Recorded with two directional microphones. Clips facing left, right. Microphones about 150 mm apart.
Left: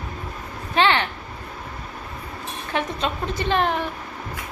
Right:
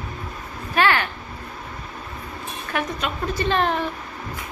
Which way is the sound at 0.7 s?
20° left (ahead or behind).